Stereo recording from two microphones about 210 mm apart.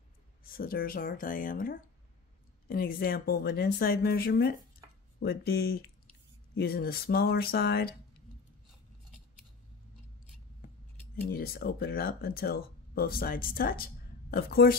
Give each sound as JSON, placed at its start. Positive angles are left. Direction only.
{"t": 0.4, "sound": "speech", "side_deg": 45}
{"t": 11.2, "sound": "speech", "side_deg": 45}